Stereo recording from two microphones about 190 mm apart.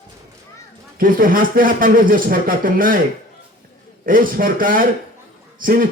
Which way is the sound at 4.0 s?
45° right (ahead or behind).